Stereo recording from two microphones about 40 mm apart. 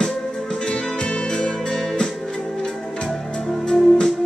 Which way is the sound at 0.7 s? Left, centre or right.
Left.